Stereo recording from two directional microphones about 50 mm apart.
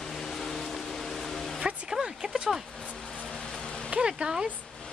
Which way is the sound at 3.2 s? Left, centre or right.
Centre.